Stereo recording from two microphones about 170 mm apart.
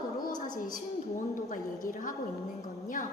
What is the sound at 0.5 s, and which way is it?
A woman's voice, 50° left (ahead or behind).